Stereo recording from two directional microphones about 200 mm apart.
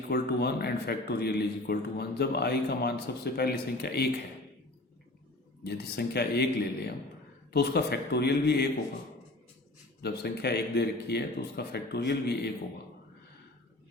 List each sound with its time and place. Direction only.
0.1 s a man's voice: 55° left (ahead or behind)
5.6 s a man's voice: 55° left (ahead or behind)
10.0 s speech: 55° left (ahead or behind)